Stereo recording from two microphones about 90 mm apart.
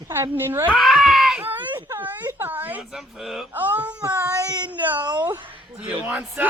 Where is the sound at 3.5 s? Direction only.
20° right (ahead or behind).